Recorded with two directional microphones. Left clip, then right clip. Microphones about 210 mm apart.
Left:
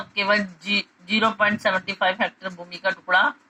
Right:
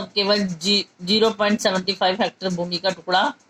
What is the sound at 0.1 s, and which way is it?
A man's voice, 55° right (ahead or behind).